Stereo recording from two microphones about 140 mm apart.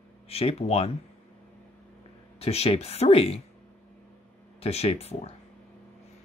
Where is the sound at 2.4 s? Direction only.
45° left (ahead or behind).